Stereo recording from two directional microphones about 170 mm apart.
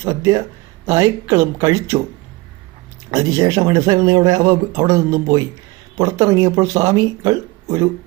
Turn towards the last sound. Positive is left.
turn(degrees=-20)  # may be behind; listen again after turning